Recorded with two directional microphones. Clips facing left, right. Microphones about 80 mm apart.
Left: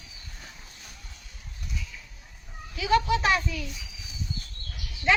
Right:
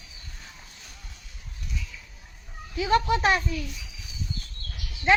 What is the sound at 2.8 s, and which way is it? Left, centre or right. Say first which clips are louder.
Speech: right 1 dB; right.